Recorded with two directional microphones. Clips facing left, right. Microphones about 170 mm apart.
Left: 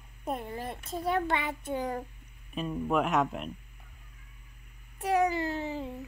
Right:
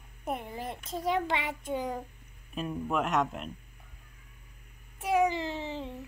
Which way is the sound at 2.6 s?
Centre (ahead or behind).